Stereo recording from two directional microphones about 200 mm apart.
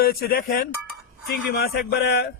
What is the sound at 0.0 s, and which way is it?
Speech, 50° left (ahead or behind).